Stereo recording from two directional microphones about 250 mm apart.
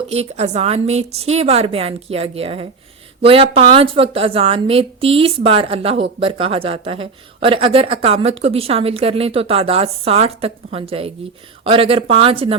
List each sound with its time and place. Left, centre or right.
0.1 s a woman's voice: right